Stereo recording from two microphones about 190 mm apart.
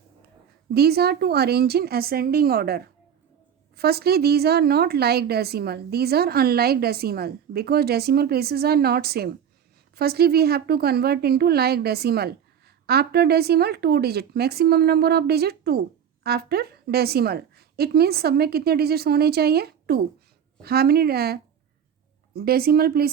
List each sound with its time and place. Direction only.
0.7 s a woman's voice: 55° right (ahead or behind)